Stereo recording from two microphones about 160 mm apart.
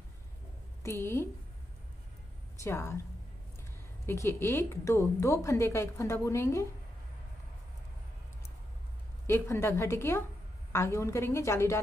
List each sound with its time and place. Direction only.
0.8 s a woman's voice: 15° left (ahead or behind)
2.6 s a woman's voice: 15° left (ahead or behind)
4.0 s a woman's voice: 15° left (ahead or behind)
9.3 s a woman's voice: 15° left (ahead or behind)